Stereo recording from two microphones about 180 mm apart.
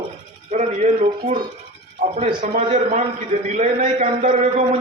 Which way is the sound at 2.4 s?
45° right (ahead or behind).